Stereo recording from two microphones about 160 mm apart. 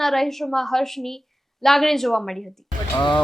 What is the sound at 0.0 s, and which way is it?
A woman's voice, centre (ahead or behind).